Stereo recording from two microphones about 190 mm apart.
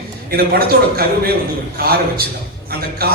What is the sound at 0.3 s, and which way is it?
A man's voice, 55° right (ahead or behind).